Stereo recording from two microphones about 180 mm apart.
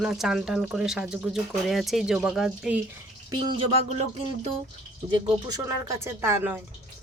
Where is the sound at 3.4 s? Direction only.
25° right (ahead or behind).